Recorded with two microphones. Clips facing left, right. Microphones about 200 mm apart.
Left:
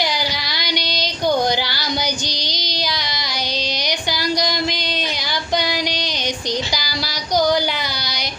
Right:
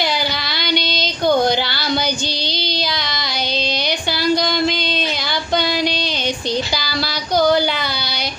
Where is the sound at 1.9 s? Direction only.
15° left (ahead or behind).